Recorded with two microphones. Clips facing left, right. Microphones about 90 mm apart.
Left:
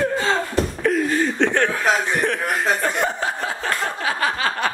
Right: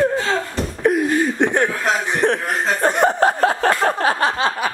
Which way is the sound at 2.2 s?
35° right (ahead or behind).